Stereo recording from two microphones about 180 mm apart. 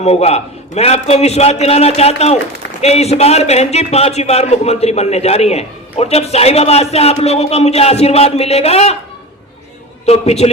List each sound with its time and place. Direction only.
0.0 s a man's voice: 35° left (ahead or behind)
10.1 s a man's voice: 35° left (ahead or behind)